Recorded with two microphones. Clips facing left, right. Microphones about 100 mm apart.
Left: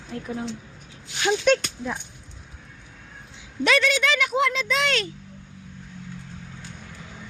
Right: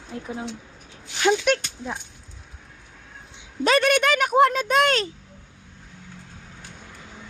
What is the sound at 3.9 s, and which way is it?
Speech, 50° right (ahead or behind).